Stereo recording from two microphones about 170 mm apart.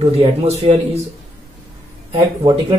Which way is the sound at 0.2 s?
40° right (ahead or behind).